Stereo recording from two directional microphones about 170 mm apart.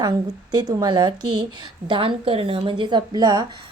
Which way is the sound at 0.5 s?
25° right (ahead or behind).